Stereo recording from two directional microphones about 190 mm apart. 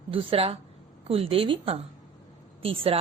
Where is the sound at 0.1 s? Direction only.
30° right (ahead or behind).